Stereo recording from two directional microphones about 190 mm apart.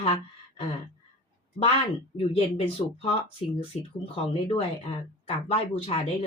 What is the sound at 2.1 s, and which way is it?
Speech, 30° left (ahead or behind).